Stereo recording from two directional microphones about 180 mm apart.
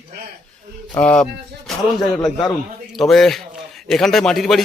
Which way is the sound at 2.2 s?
20° left (ahead or behind).